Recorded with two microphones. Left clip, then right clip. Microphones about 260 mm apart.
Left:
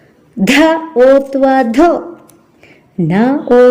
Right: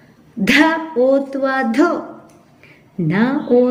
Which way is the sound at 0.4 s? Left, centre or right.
Left.